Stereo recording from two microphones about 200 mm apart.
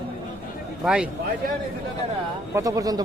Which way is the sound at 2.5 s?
15° right (ahead or behind).